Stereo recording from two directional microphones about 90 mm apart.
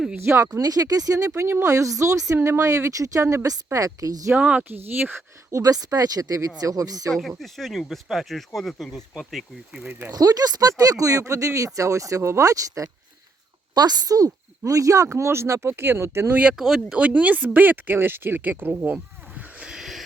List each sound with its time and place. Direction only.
0.3 s speech: 30° right (ahead or behind)
1.3 s speech: 25° right (ahead or behind)
4.4 s speech: 15° right (ahead or behind)
5.5 s a woman's voice: 40° right (ahead or behind)
7.1 s speech: centre (ahead or behind)
10.1 s speech: 45° right (ahead or behind); by 16.4 s 30° right (ahead or behind)
16.4 s speech: 10° right (ahead or behind)
18.9 s a sound: 15° right (ahead or behind)